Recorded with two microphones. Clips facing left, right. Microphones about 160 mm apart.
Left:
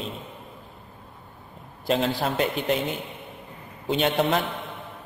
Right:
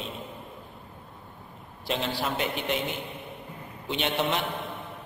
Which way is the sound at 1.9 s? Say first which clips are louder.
Left 5 dB; 45° left (ahead or behind).